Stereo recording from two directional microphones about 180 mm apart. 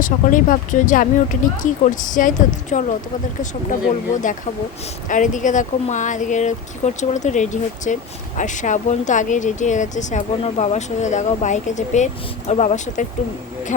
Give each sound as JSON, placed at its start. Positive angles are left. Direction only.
{"t": 0.0, "sound": "speech", "side_deg": 45}